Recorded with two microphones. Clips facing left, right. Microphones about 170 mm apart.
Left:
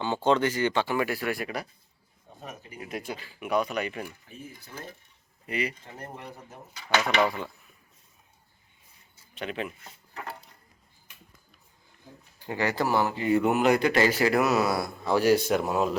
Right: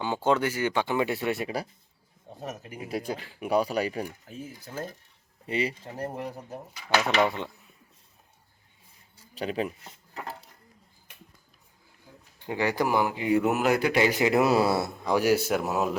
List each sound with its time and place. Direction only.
0.0 s speech: 10° right (ahead or behind); by 1.6 s 25° right (ahead or behind)
2.3 s a sound: 25° right (ahead or behind)
2.9 s speech: 35° right (ahead or behind)
5.5 s speech: 30° right (ahead or behind)
6.8 s speech: 5° right (ahead or behind)
9.3 s speech: 35° right (ahead or behind)
12.5 s speech: 15° right (ahead or behind)
15.1 s speech: 10° right (ahead or behind)